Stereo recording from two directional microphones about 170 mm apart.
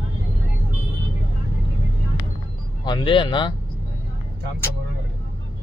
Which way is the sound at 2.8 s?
30° left (ahead or behind).